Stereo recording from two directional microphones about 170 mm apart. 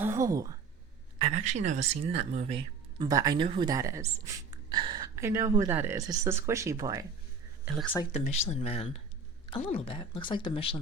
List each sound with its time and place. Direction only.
0.0 s a woman's voice: 15° right (ahead or behind)
1.2 s speech: 45° right (ahead or behind)
2.6 s speech: 25° right (ahead or behind)
8.1 s speech: 40° left (ahead or behind)